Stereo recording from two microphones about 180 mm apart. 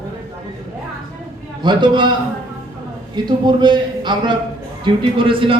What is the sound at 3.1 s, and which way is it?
Speech, 25° right (ahead or behind).